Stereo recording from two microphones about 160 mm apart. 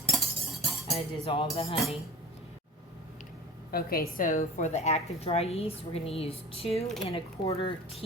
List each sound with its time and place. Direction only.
0.1 s cutlery: centre (ahead or behind)
0.9 s a woman's voice: 35° left (ahead or behind)
3.7 s a woman's voice: 70° left (ahead or behind); by 6.8 s 35° left (ahead or behind)
7.4 s speech: 20° left (ahead or behind)